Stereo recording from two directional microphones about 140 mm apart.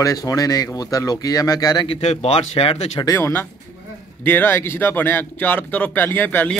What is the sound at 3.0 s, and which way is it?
Speech, 20° left (ahead or behind).